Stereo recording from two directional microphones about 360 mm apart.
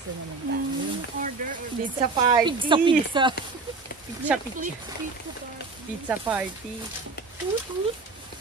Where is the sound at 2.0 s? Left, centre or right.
Centre.